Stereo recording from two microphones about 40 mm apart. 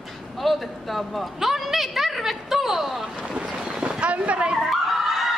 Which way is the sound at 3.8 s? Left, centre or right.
Right.